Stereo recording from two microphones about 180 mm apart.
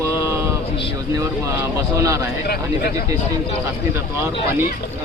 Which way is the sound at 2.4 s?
60° left (ahead or behind).